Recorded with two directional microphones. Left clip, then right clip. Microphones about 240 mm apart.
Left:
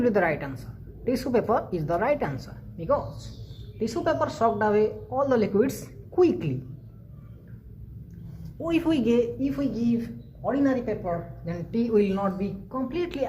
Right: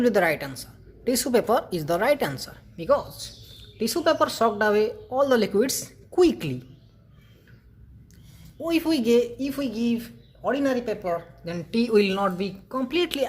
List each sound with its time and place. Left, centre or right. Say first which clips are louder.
0.0 s speech: right 2 dB; right
8.6 s speech: right 1 dB; right